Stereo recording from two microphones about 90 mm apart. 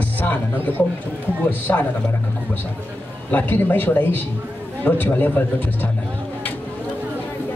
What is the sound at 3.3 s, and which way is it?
Speech, 20° left (ahead or behind).